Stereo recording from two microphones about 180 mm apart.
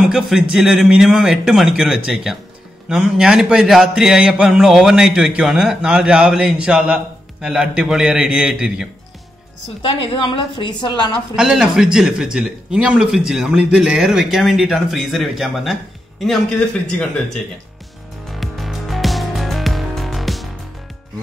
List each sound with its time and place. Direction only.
0.1 s speech: 5° right (ahead or behind)
9.8 s a woman's voice: 30° left (ahead or behind)
11.3 s speech: 5° right (ahead or behind)
18.3 s music: centre (ahead or behind)